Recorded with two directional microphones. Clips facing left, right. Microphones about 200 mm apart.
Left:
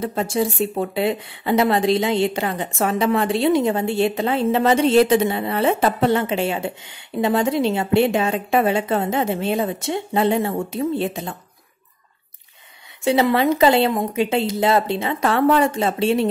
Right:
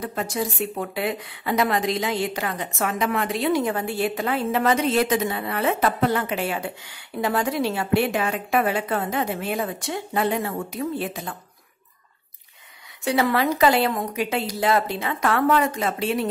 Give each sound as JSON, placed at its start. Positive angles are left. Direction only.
{"t": 0.0, "sound": "speech", "side_deg": 25}
{"t": 13.0, "sound": "speech", "side_deg": 25}